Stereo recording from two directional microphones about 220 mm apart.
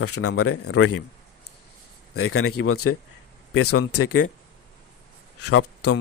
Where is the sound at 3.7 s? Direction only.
90° left.